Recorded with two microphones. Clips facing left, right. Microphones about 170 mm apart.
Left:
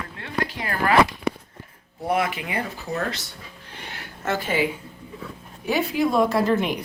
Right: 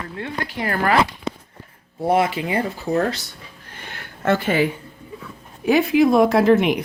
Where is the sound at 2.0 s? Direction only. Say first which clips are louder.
Right 5 dB; 30° right (ahead or behind).